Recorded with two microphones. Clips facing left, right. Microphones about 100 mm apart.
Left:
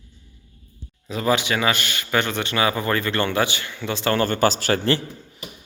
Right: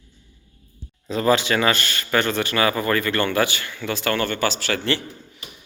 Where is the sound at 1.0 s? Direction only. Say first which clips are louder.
Right 2 dB; 10° left (ahead or behind).